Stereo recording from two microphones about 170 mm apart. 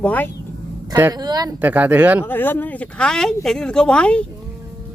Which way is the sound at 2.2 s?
10° left (ahead or behind).